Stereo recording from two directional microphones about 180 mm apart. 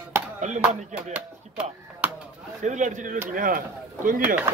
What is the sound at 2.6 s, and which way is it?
Speech, 40° right (ahead or behind).